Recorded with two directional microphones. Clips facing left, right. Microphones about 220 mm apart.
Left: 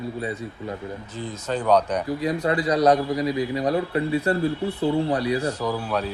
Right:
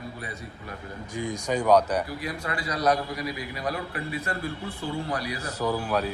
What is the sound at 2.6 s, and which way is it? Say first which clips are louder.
A man's voice: left 5 dB; 25° left (ahead or behind).